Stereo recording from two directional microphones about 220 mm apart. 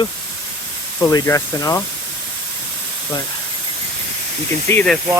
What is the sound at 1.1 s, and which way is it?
Speech, 15° left (ahead or behind).